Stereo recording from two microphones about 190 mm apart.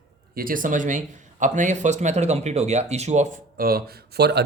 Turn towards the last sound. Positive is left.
turn(degrees=-60)  # may be behind; listen again after turning